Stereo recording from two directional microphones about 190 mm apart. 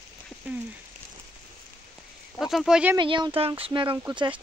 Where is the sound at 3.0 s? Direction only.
25° right (ahead or behind).